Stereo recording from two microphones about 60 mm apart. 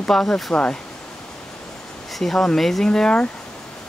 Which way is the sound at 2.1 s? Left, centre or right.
Centre.